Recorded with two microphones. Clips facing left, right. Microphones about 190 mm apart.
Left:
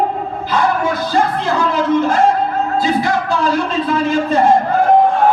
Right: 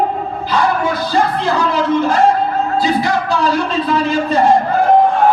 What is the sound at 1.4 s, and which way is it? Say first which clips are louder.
A man's voice: right 1 dB; 50° left (ahead or behind).